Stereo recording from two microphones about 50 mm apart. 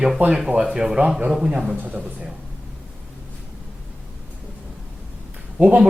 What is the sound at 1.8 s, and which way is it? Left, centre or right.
Speech, right.